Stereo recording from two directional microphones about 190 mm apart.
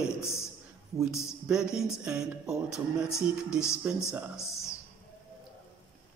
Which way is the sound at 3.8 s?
10° right (ahead or behind).